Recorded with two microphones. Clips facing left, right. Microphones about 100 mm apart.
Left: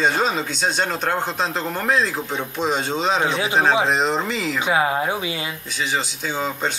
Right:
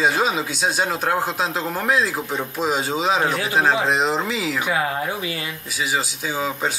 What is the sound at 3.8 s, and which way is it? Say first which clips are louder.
Speech: even; centre (ahead or behind).